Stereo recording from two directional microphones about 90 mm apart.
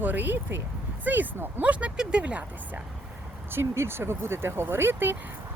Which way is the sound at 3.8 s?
25° right (ahead or behind).